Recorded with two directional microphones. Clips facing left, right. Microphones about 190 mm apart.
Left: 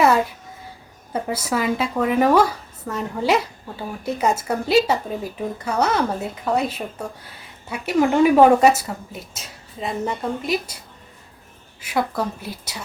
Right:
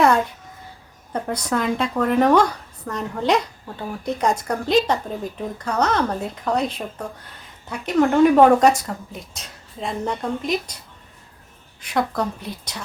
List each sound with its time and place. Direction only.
0.0 s a sound: 5° left (ahead or behind)
1.1 s speech: 5° left (ahead or behind)
11.8 s speech: 5° left (ahead or behind)